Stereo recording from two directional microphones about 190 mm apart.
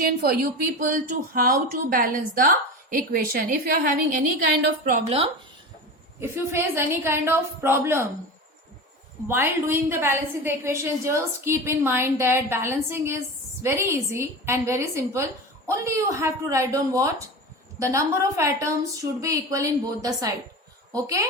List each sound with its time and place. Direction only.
0.0 s a woman's voice: 50° right (ahead or behind); by 5.3 s 30° right (ahead or behind)
6.1 s a woman's voice: 15° right (ahead or behind)
9.2 s a woman's voice: 10° right (ahead or behind)